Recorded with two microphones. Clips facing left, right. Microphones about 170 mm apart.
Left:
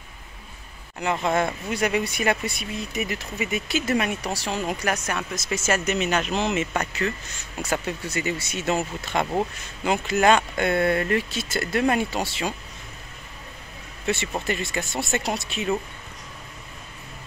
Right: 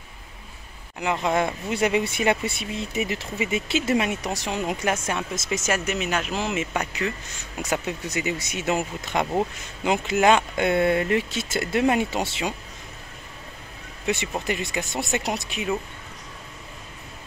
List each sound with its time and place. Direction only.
1.2 s speech: 15° right (ahead or behind)
14.0 s speech: 15° right (ahead or behind)